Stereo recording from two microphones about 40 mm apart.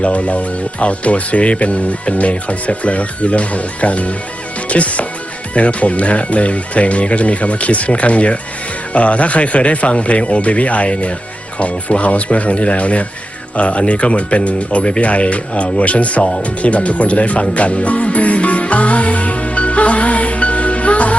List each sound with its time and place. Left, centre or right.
0.0 s speech: left